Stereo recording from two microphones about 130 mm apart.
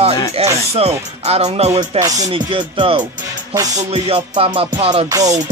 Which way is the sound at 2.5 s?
40° right (ahead or behind).